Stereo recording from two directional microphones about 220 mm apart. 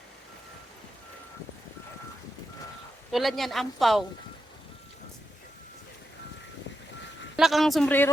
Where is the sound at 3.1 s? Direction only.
Centre (ahead or behind).